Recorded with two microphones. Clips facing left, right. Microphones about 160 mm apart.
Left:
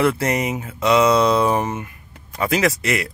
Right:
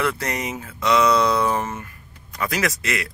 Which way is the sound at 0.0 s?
25° left (ahead or behind).